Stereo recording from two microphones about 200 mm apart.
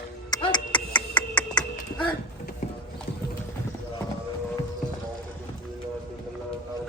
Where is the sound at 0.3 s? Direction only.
20° left (ahead or behind).